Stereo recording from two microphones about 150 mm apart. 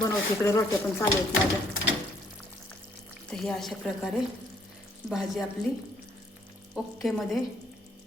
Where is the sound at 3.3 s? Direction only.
5° left (ahead or behind).